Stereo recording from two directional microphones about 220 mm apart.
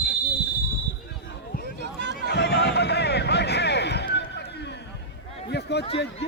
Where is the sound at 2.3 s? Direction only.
50° left (ahead or behind).